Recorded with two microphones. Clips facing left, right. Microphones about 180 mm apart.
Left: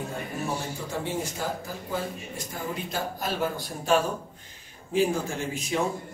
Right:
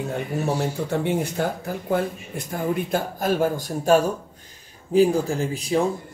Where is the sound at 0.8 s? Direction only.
60° right (ahead or behind).